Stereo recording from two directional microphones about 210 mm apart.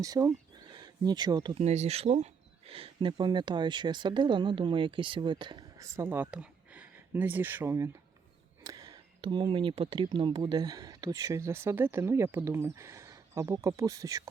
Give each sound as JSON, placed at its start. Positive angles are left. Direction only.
{"t": 0.0, "sound": "speech", "side_deg": -15}